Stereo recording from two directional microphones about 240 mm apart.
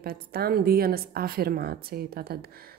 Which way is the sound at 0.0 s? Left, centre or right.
Right.